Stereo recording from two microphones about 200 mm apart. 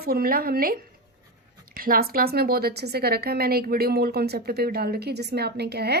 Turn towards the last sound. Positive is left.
turn(degrees=-55)  # may be behind; listen again after turning